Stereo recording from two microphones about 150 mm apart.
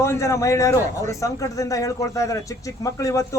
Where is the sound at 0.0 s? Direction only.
20° left (ahead or behind).